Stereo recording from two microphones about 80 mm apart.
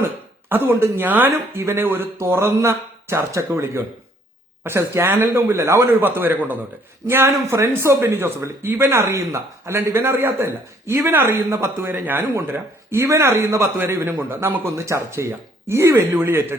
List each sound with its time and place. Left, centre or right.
0.4 s a man's voice: right